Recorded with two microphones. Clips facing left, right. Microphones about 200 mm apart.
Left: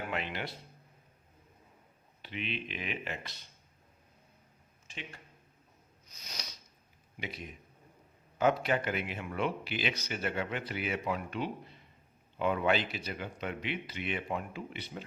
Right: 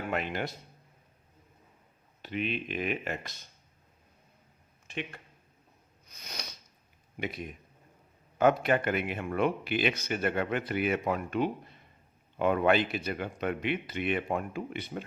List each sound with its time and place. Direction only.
0.1 s speech: 45° right (ahead or behind)
2.2 s speech: 45° right (ahead or behind)
4.9 s speech: 60° right (ahead or behind)
6.1 s a sound: 55° right (ahead or behind)
7.2 s speech: 50° right (ahead or behind)